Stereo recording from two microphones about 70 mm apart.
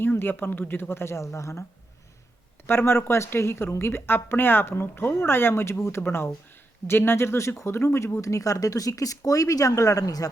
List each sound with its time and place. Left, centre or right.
0.0 s a woman's voice: left
2.6 s a woman's voice: left